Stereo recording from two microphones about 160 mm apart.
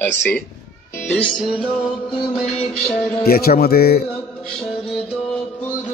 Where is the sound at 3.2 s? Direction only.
70° left (ahead or behind).